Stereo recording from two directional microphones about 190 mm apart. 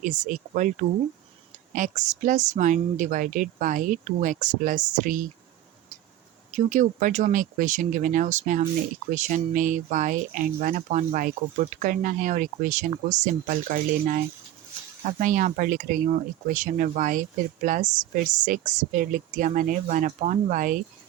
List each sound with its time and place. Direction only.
0.0 s speech: 40° right (ahead or behind)
1.7 s speech: 40° right (ahead or behind)
6.5 s speech: 40° right (ahead or behind)